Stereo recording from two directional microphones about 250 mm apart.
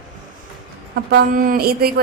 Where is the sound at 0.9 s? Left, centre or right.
Right.